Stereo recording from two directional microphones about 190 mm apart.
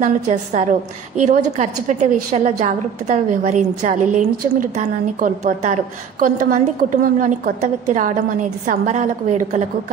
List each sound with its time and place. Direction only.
0.0 s a woman's voice: 40° right (ahead or behind)